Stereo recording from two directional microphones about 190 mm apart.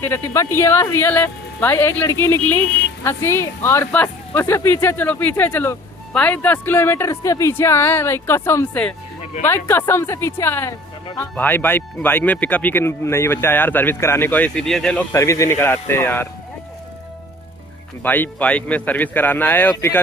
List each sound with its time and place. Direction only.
0.0 s speech: 10° left (ahead or behind)
9.2 s music: 40° left (ahead or behind)
9.5 s speech: 10° left (ahead or behind)
18.0 s speech: 10° left (ahead or behind)